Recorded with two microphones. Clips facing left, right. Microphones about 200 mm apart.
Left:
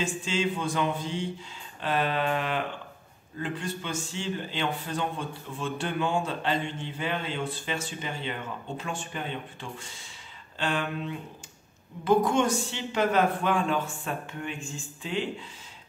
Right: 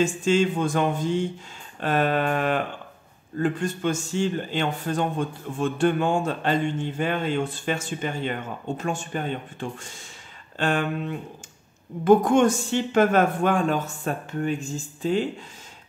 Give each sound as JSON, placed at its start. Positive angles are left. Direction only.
{"t": 0.0, "sound": "a man's voice", "side_deg": -50}